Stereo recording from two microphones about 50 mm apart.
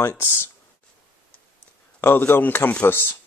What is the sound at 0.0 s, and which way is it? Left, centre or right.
Speech, left.